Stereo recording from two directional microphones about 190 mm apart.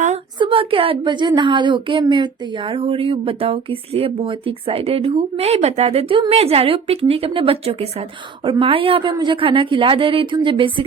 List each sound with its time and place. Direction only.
0.3 s a woman's voice: 25° right (ahead or behind)